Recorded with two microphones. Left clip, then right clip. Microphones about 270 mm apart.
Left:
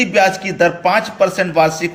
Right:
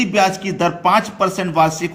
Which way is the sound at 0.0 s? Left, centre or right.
Centre.